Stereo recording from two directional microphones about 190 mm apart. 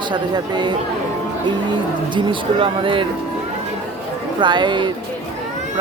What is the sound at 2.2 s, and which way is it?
Speech, 25° right (ahead or behind).